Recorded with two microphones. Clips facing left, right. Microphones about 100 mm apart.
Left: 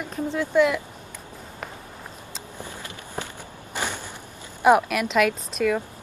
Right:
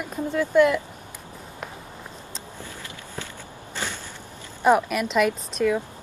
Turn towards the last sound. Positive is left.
turn(degrees=0)  # may be behind; listen again after turning